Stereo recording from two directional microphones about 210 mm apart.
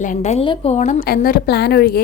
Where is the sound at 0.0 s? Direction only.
35° left (ahead or behind).